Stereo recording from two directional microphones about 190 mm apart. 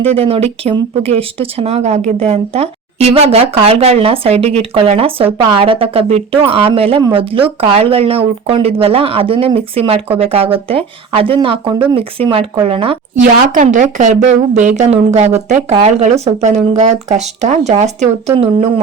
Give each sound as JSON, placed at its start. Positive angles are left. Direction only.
{"t": 0.0, "sound": "speech", "side_deg": -30}
{"t": 13.2, "sound": "speech", "side_deg": -45}